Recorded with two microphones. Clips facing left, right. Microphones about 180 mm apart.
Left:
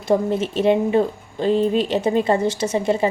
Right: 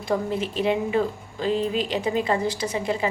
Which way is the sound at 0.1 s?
25° left (ahead or behind).